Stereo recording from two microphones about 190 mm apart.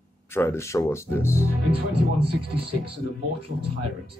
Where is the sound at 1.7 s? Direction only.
30° right (ahead or behind).